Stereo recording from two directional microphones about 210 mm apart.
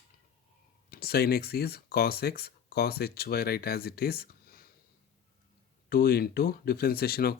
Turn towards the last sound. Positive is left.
turn(degrees=45)  # may be behind; listen again after turning